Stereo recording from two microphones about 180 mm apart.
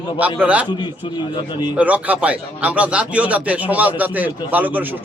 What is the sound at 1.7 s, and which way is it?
A man's voice, 10° right (ahead or behind).